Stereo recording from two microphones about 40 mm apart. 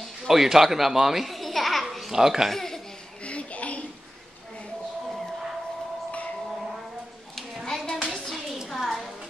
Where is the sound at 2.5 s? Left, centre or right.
Centre.